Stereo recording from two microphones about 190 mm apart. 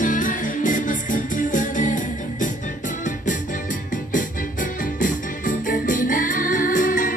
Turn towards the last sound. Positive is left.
turn(degrees=45)  # may be behind; listen again after turning